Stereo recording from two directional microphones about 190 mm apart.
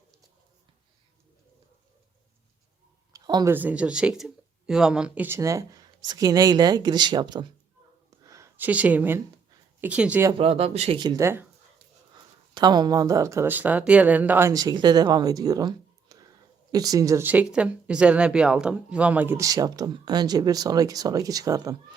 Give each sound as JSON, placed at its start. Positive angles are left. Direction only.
{"t": 3.1, "sound": "a sound", "side_deg": -20}
{"t": 3.5, "sound": "speech", "side_deg": -10}
{"t": 10.3, "sound": "speech", "side_deg": -30}
{"t": 12.5, "sound": "speech", "side_deg": -20}